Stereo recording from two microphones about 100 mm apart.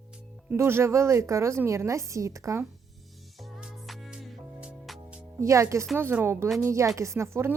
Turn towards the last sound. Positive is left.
turn(degrees=-25)  # may be behind; listen again after turning